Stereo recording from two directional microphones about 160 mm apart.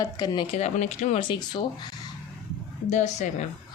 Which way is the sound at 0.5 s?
45° left (ahead or behind).